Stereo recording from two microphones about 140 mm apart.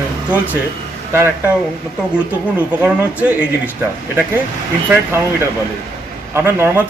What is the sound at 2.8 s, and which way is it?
Speech, 10° right (ahead or behind).